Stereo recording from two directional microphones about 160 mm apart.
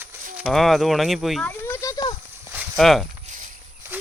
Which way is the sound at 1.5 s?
15° left (ahead or behind).